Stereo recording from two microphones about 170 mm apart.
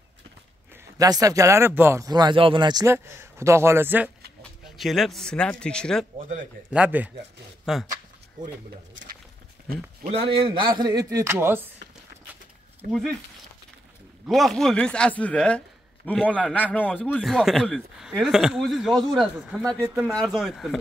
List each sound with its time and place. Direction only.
0.9 s speech: 20° right (ahead or behind)
4.4 s speech: centre (ahead or behind)
6.7 s a man's voice: 10° right (ahead or behind)
10.0 s speech: 35° right (ahead or behind); by 11.7 s 15° right (ahead or behind)
14.2 s speech: centre (ahead or behind)